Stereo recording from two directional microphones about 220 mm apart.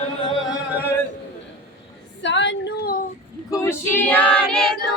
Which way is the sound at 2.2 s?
55° left (ahead or behind).